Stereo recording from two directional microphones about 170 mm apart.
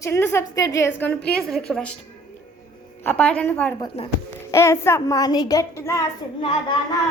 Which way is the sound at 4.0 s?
40° left (ahead or behind).